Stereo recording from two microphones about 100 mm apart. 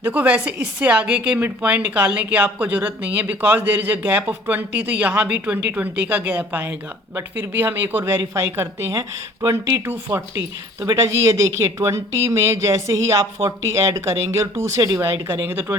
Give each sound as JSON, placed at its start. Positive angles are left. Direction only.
{"t": 0.0, "sound": "speech", "side_deg": -15}
{"t": 15.0, "sound": "speech", "side_deg": -25}